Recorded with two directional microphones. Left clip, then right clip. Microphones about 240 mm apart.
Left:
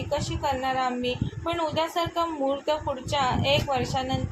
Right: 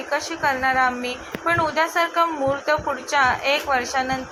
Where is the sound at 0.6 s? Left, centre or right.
Centre.